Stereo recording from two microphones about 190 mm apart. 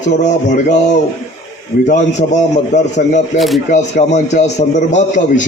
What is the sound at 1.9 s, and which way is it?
A man's voice, 40° left (ahead or behind).